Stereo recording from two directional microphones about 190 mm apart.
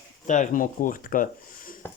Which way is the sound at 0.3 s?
45° left (ahead or behind).